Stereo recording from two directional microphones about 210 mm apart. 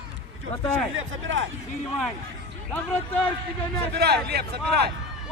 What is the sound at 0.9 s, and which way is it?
Speech, 65° right (ahead or behind).